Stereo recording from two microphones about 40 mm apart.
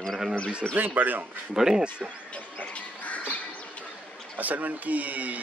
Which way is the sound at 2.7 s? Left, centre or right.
Left.